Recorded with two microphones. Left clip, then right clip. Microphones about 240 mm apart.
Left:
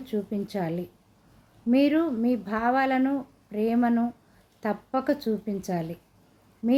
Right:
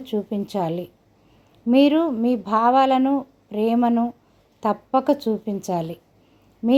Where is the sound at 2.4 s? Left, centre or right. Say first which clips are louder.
Right 10 dB; right.